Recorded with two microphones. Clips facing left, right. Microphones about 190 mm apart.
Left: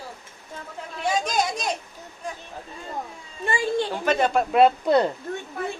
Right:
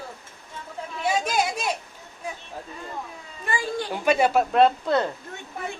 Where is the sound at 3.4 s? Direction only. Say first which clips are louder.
Left 4 dB; 25° left (ahead or behind).